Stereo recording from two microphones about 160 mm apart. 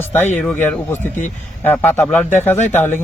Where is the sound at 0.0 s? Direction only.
15° left (ahead or behind).